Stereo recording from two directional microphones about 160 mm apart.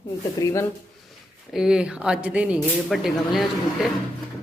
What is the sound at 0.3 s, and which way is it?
Speech, 20° left (ahead or behind).